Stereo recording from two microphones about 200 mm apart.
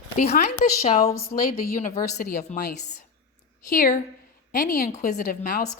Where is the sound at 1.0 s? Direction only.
15° left (ahead or behind).